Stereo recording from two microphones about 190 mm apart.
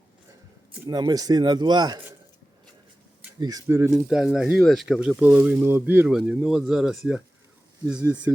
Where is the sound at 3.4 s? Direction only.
20° right (ahead or behind).